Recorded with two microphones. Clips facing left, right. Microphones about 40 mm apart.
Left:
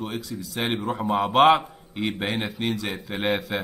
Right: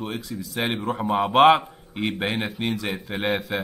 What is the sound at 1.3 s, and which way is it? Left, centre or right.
A man's voice, right.